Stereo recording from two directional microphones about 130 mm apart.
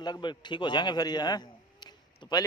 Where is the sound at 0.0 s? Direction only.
35° left (ahead or behind).